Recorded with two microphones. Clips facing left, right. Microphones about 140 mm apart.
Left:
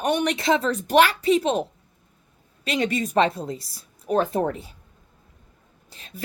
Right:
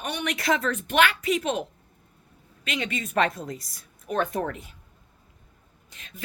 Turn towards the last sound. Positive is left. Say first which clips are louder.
# left 5 dB
turn(degrees=35)  # may be behind; listen again after turning